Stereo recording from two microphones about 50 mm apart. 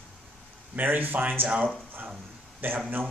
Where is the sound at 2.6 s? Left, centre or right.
Right.